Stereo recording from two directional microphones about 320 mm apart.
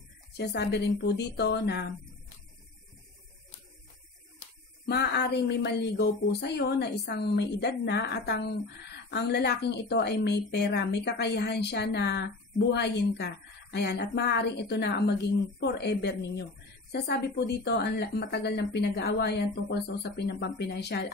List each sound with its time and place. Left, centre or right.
0.4 s a woman's voice: left
4.8 s a woman's voice: left